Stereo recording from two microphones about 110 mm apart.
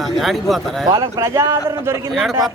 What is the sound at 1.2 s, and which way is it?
Speech, 25° right (ahead or behind).